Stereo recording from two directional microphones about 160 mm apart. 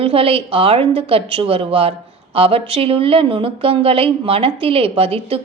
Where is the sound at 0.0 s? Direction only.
35° right (ahead or behind).